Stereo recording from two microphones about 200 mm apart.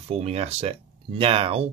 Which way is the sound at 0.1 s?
30° right (ahead or behind).